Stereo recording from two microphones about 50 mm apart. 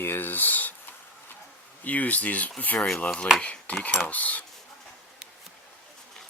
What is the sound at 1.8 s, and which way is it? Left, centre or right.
Speech, left.